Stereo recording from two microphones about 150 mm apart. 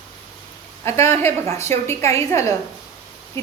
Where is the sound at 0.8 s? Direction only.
15° left (ahead or behind).